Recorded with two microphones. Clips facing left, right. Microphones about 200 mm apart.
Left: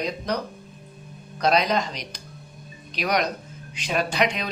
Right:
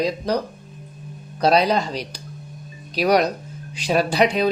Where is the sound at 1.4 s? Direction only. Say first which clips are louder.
Right 4 dB; 35° right (ahead or behind).